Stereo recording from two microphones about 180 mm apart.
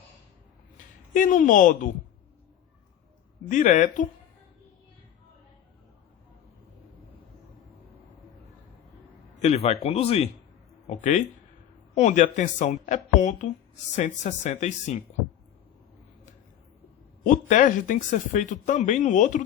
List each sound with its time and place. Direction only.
1.1 s speech: 45° left (ahead or behind)
3.5 s speech: 45° left (ahead or behind)
9.4 s speech: 35° left (ahead or behind)
17.2 s speech: 45° left (ahead or behind)